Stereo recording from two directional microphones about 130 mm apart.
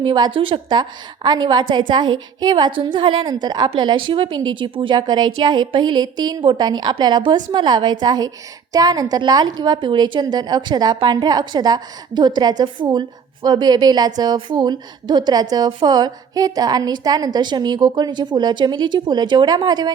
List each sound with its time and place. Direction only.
0.0 s a woman's voice: 40° right (ahead or behind)